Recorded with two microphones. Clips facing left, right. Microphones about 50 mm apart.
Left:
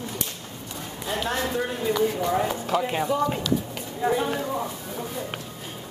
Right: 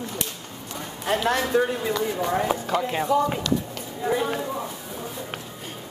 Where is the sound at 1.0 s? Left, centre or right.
Right.